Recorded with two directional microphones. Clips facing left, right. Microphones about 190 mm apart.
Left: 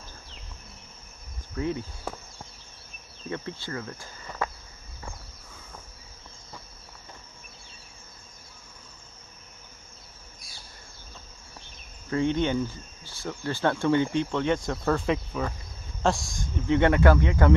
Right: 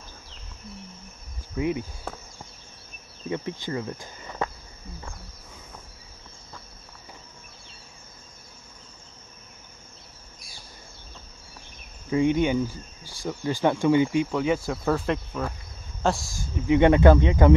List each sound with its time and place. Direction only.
1.5 s speech: 15° right (ahead or behind)
2.1 s insect: 5° left (ahead or behind)
3.3 s speech: 15° right (ahead or behind)
12.1 s speech: 10° right (ahead or behind)